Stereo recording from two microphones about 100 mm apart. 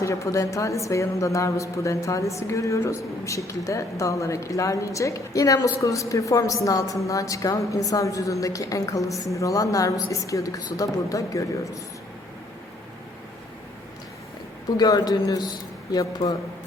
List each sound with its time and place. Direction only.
0.0 s a woman's voice: 30° left (ahead or behind)
14.8 s a woman's voice: 40° left (ahead or behind)